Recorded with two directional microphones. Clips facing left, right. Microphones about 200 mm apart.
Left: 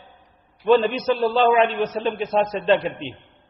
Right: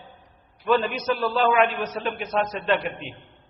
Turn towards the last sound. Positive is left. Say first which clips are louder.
# left 5 dB
turn(degrees=30)  # may be behind; listen again after turning